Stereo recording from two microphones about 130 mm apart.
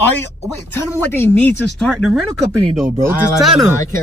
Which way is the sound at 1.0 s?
15° left (ahead or behind).